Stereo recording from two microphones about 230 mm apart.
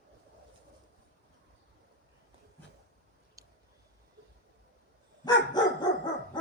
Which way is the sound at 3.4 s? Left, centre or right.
Centre.